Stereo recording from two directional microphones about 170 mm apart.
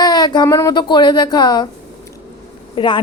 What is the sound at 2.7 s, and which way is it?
Speech, 25° left (ahead or behind).